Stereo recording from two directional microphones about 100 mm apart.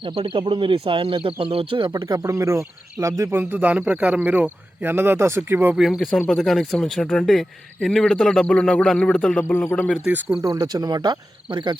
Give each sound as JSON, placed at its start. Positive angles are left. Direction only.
{"t": 0.0, "sound": "speech", "side_deg": -60}
{"t": 1.9, "sound": "speech", "side_deg": -45}
{"t": 3.5, "sound": "speech", "side_deg": -15}
{"t": 5.7, "sound": "speech", "side_deg": -5}
{"t": 6.1, "sound": "speech", "side_deg": 10}
{"t": 9.4, "sound": "speech", "side_deg": 20}
{"t": 10.1, "sound": "speech", "side_deg": -20}
{"t": 10.4, "sound": "speech", "side_deg": -40}